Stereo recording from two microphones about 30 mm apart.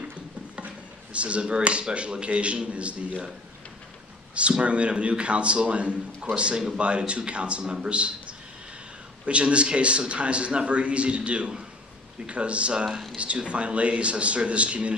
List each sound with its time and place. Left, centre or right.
0.6 s a sound: right
2.0 s a man's voice: right
4.6 s a man's voice: right